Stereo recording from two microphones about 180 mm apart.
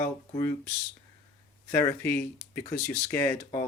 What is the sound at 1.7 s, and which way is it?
Speech, 15° left (ahead or behind).